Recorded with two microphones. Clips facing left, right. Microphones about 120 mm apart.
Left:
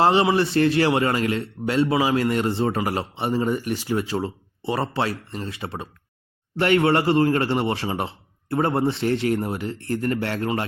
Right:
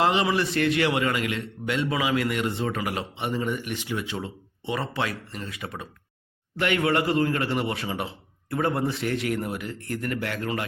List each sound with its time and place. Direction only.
0.0 s a man's voice: 35° left (ahead or behind)